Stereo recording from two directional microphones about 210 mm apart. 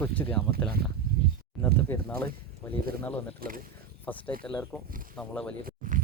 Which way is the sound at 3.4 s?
45° right (ahead or behind).